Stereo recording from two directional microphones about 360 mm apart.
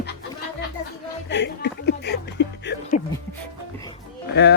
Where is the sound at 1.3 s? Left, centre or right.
Left.